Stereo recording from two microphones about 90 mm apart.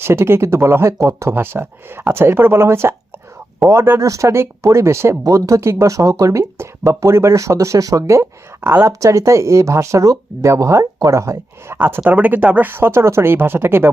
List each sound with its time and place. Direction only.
0.0 s speech: 30° right (ahead or behind)